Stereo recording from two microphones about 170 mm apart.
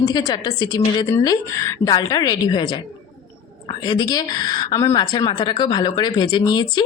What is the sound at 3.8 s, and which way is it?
A woman's voice, 25° left (ahead or behind).